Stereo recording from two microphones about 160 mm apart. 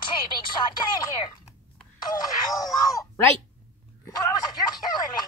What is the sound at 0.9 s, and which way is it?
Speech, 25° left (ahead or behind).